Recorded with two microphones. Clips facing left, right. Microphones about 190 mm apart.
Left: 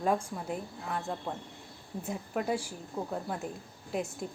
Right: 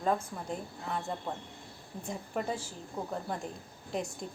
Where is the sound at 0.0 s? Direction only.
10° left (ahead or behind).